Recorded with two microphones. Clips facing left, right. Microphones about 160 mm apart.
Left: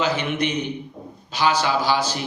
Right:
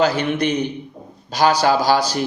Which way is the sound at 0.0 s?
40° right (ahead or behind).